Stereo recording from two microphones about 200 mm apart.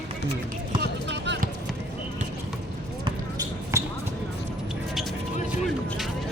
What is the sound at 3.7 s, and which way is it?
Basketball bounce, 15° right (ahead or behind).